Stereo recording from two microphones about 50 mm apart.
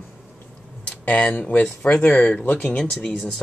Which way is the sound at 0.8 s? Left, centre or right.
Left.